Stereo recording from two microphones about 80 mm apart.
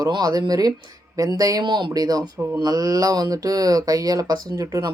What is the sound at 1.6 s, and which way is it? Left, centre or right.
Speech, right.